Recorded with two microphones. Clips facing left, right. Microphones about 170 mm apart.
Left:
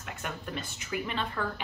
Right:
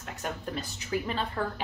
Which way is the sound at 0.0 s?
35° right (ahead or behind).